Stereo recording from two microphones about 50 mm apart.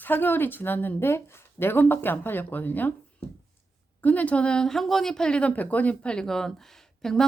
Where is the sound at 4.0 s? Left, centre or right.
Left; by 4.7 s centre.